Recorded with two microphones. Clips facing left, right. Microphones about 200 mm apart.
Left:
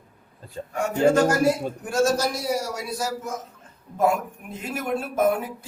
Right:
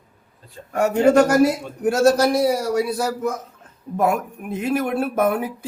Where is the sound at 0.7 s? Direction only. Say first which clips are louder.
Right 4 dB; 65° right (ahead or behind).